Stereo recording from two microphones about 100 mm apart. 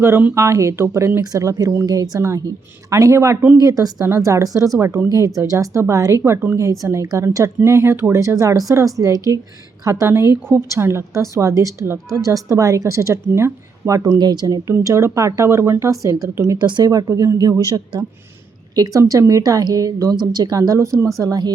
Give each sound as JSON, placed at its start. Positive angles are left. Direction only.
{"t": 0.0, "sound": "a woman's voice", "side_deg": -20}
{"t": 4.0, "sound": "speech", "side_deg": -25}
{"t": 5.0, "sound": "a woman's voice", "side_deg": -35}
{"t": 14.2, "sound": "speech", "side_deg": -45}
{"t": 14.7, "sound": "a woman's voice", "side_deg": -30}
{"t": 16.6, "sound": "speech", "side_deg": -50}
{"t": 16.9, "sound": "a woman's voice", "side_deg": -35}
{"t": 18.8, "sound": "a woman's voice", "side_deg": -35}